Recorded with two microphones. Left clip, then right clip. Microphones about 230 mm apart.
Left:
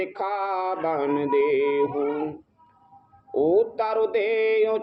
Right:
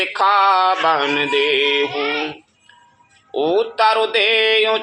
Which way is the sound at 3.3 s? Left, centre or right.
Right.